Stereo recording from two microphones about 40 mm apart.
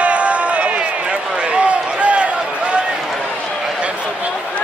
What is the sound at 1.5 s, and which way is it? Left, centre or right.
Run, right.